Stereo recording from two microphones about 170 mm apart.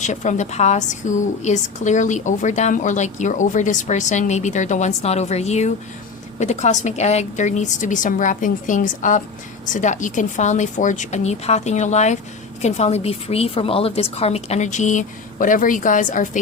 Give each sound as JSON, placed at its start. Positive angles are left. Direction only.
{"t": 0.0, "sound": "a woman's voice", "side_deg": 45}